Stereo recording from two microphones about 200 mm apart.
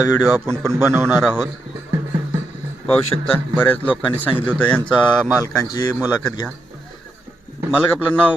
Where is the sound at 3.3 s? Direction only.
10° left (ahead or behind).